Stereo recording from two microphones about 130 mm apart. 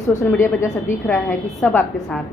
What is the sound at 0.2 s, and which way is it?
A woman's voice, 20° left (ahead or behind).